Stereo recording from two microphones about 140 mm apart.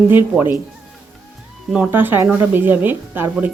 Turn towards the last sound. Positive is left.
turn(degrees=-15)  # may be behind; listen again after turning